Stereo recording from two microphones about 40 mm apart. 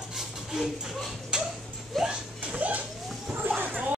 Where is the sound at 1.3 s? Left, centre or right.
Centre.